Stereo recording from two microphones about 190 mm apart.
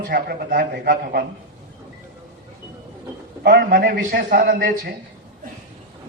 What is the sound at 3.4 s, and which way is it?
A man's voice, 55° right (ahead or behind).